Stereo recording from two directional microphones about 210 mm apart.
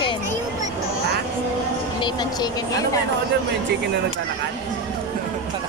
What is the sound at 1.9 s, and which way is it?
Speech, 20° left (ahead or behind).